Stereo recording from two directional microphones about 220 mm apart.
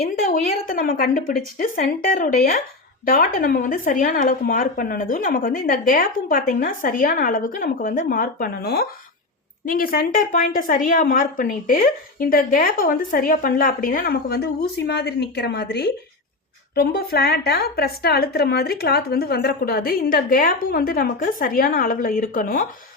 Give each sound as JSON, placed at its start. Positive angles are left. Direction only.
{"t": 0.0, "sound": "a woman's voice", "side_deg": 35}